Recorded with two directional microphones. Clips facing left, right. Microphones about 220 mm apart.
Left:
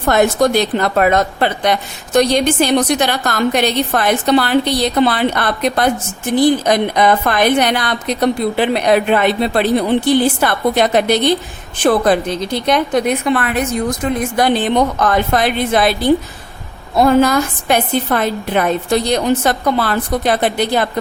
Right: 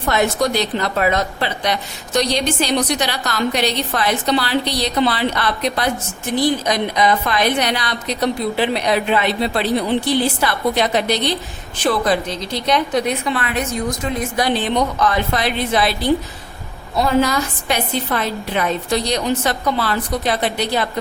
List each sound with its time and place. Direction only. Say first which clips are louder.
0.1 s a woman's voice: left 5 dB; 50° left (ahead or behind)
17.0 s a woman's voice: left 5 dB; 50° left (ahead or behind)